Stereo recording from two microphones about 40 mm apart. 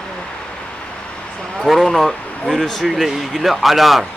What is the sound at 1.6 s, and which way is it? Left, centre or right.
Speech, centre.